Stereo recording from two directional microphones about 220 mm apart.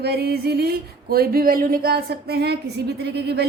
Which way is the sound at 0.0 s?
45° right (ahead or behind).